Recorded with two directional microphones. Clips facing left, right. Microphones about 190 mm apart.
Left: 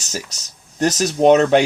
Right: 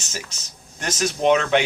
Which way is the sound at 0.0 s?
40° left (ahead or behind).